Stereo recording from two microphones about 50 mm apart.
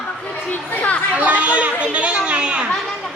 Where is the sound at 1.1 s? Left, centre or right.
Right.